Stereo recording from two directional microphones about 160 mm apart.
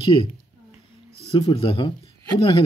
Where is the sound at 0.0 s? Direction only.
30° left (ahead or behind).